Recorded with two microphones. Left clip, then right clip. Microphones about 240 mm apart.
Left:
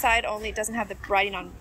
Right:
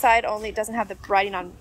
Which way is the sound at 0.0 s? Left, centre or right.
Centre.